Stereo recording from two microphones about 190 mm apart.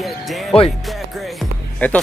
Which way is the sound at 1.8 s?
5° left (ahead or behind).